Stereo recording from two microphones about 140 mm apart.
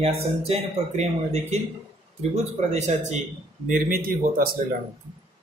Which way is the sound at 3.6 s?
75° right (ahead or behind).